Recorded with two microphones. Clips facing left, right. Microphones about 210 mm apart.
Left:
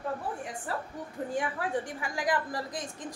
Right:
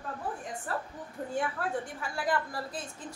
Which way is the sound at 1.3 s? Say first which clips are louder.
Even; 15° left (ahead or behind).